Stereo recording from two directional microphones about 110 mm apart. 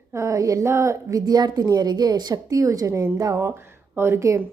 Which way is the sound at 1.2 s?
40° right (ahead or behind).